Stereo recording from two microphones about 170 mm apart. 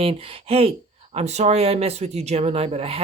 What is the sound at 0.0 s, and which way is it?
Speech, 35° right (ahead or behind).